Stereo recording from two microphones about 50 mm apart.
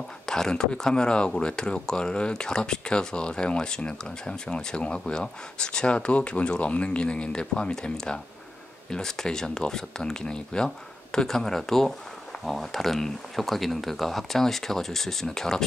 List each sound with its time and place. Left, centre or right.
0.3 s speech: centre